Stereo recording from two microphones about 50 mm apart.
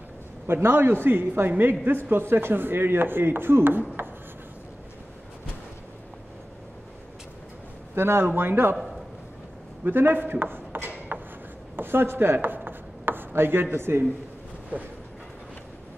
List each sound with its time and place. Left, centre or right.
0.5 s speech: right
7.9 s speech: right
8.3 s speech: right
9.8 s a man's voice: right
11.1 s a sound: right
11.7 s chopping: right